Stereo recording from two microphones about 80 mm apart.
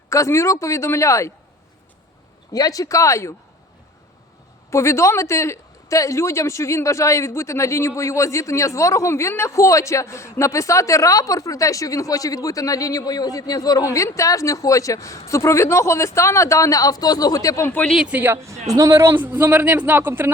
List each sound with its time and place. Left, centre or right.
0.1 s speech: left
2.5 s speech: left
4.7 s speech: left
17.9 s speech: centre
18.4 s a man's voice: right
19.0 s a man's voice: right